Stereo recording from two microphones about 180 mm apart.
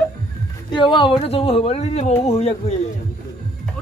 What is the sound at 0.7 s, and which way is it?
Speech, 25° left (ahead or behind).